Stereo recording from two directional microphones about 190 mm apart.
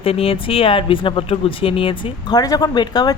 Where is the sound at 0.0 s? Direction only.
30° left (ahead or behind).